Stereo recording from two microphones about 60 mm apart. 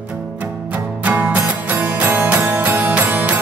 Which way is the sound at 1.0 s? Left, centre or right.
Right.